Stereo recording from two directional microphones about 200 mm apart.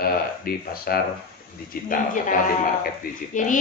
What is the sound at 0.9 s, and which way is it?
Speech, 50° left (ahead or behind).